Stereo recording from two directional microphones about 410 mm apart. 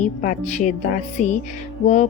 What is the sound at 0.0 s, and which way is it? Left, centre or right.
A woman's voice, centre.